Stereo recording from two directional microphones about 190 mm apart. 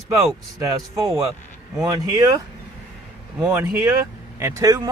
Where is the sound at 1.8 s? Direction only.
20° right (ahead or behind).